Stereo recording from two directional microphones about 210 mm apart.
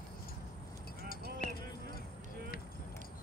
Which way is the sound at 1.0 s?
45° left (ahead or behind).